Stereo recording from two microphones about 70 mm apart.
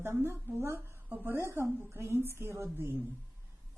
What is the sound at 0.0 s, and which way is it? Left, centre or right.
A woman's voice, right.